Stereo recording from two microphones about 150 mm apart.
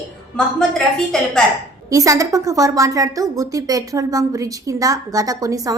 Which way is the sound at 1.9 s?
20° right (ahead or behind).